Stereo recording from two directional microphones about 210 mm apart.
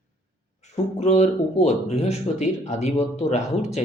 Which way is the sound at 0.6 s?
30° left (ahead or behind).